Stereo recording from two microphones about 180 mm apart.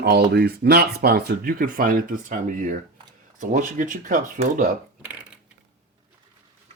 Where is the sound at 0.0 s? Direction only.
65° right (ahead or behind); by 4.7 s 45° right (ahead or behind).